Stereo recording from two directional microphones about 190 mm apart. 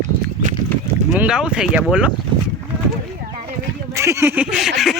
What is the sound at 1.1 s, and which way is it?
Speech, 5° right (ahead or behind).